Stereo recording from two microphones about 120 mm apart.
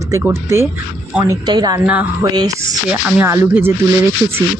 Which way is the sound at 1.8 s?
15° right (ahead or behind).